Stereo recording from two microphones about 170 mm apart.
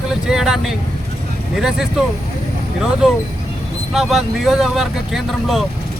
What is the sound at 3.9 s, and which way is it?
Speech, centre (ahead or behind).